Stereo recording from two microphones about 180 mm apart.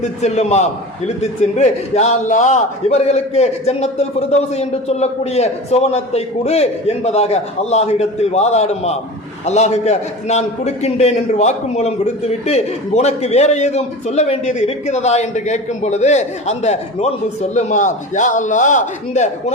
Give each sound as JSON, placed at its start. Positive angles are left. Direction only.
{"t": 0.0, "sound": "a man's voice", "side_deg": 40}